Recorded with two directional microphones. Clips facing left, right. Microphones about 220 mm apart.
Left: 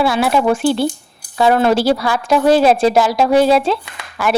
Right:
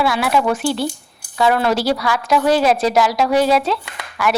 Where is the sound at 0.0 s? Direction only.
25° left (ahead or behind).